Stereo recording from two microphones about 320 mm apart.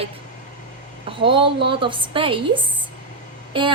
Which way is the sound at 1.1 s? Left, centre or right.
Centre.